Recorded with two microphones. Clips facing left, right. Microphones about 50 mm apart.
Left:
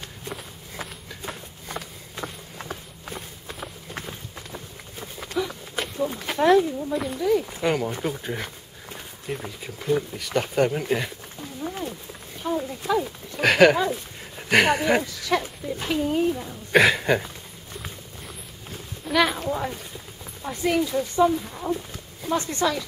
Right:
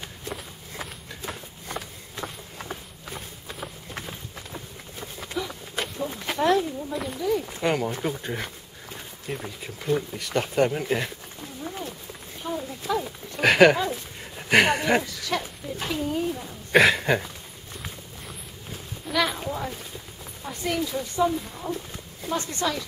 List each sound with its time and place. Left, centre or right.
0.2 s walk: centre
5.4 s a sound: centre
6.3 s speech: centre
6.6 s speech: centre
16.1 s speech: left
16.3 s a sound: centre
18.7 s a sound: centre
20.4 s speech: centre
22.4 s speech: left